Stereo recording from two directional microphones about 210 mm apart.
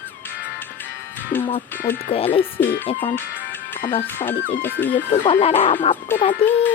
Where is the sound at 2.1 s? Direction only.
25° left (ahead or behind).